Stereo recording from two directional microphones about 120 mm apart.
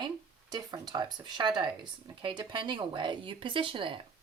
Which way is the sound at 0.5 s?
35° right (ahead or behind).